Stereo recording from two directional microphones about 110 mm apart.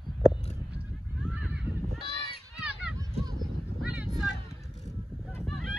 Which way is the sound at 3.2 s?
35° right (ahead or behind).